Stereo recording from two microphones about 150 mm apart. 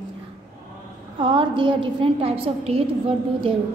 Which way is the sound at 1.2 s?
35° right (ahead or behind).